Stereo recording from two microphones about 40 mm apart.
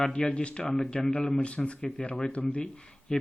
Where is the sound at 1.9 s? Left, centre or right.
Centre.